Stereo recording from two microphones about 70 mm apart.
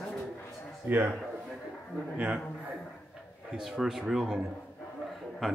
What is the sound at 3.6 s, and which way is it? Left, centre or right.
Speech, centre.